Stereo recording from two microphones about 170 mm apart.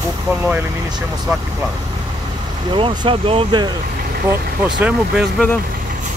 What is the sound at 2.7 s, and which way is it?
Speech, 30° right (ahead or behind).